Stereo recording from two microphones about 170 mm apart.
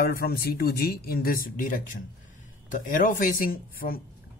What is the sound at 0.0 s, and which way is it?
Speech, 60° left (ahead or behind).